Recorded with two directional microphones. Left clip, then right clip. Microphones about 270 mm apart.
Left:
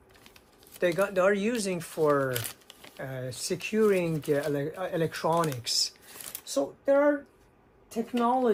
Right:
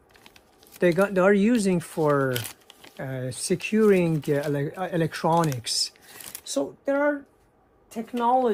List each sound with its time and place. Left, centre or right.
0.8 s speech: right
2.4 s a sound: centre
3.0 s speech: right
7.9 s speech: centre